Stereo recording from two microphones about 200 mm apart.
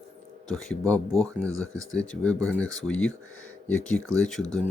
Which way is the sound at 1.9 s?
5° left (ahead or behind).